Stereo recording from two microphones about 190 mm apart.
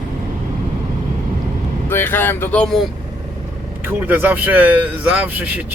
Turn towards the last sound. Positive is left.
turn(degrees=-5)  # may be behind; listen again after turning